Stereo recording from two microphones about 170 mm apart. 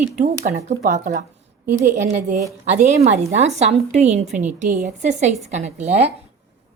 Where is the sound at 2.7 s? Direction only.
45° right (ahead or behind).